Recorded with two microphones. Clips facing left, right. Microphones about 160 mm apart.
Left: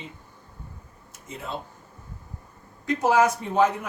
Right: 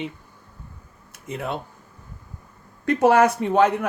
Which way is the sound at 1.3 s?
65° right (ahead or behind).